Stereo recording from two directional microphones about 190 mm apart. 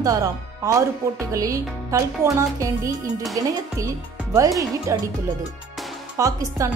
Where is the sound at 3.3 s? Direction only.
20° right (ahead or behind).